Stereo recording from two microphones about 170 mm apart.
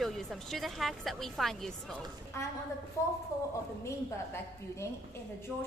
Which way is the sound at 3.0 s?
20° left (ahead or behind).